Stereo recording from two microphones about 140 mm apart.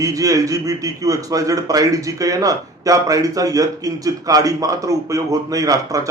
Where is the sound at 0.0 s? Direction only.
25° right (ahead or behind).